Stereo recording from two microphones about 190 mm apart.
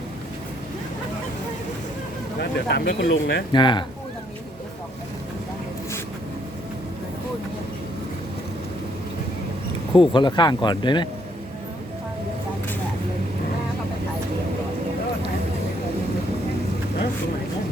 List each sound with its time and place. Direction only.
2.4 s speech: 60° left (ahead or behind)
3.5 s speech: 25° left (ahead or behind)
9.9 s speech: 25° left (ahead or behind)